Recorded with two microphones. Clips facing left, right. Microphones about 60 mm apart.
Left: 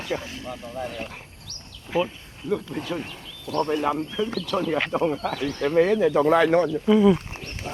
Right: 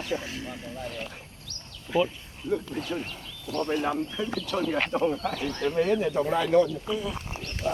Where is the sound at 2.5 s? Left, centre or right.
Left.